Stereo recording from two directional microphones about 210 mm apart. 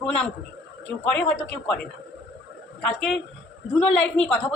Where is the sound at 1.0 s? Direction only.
5° left (ahead or behind).